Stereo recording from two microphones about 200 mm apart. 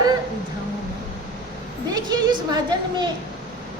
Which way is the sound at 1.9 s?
20° right (ahead or behind).